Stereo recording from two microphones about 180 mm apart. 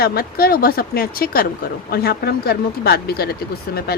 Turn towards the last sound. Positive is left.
turn(degrees=60)  # may be behind; listen again after turning